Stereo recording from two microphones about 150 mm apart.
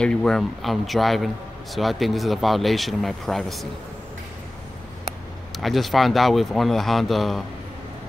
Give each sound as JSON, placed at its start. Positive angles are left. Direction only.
{"t": 0.0, "sound": "speech", "side_deg": 5}
{"t": 5.6, "sound": "speech", "side_deg": 0}